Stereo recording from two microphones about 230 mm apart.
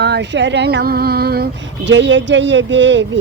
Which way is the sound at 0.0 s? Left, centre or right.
Right.